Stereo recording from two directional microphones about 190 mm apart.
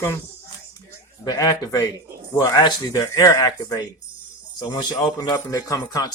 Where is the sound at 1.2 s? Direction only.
20° left (ahead or behind).